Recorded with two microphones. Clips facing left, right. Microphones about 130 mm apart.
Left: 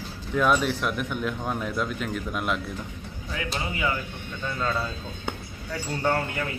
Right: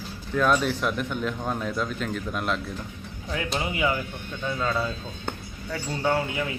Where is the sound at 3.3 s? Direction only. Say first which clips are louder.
Right 3 dB; 20° right (ahead or behind).